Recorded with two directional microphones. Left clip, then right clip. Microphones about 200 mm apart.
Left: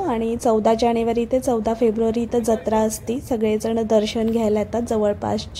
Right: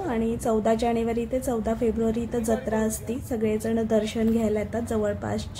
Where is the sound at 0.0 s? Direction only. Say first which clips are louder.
Left 6 dB; 25° left (ahead or behind).